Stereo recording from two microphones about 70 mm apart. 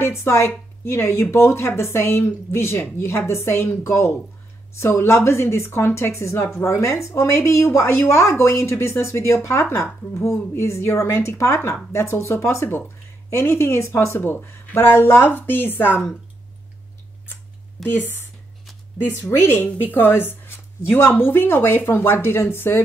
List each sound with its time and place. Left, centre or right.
0.0 s a woman's voice: left
17.8 s a woman's voice: left